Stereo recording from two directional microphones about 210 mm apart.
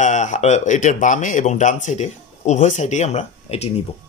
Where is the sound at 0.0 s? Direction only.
35° left (ahead or behind).